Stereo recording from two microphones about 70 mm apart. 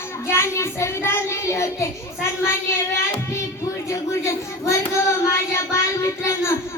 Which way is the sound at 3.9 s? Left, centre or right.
Left.